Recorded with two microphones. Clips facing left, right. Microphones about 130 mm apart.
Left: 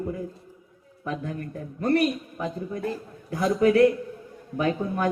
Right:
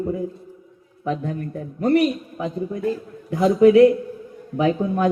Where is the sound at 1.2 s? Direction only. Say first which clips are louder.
Right 5 dB; 5° right (ahead or behind).